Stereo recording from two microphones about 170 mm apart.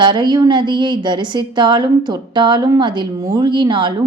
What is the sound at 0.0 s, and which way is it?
A woman's voice, 25° right (ahead or behind).